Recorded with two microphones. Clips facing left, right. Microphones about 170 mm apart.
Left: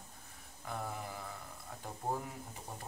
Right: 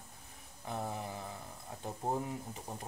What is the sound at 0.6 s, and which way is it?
Speech, 25° right (ahead or behind).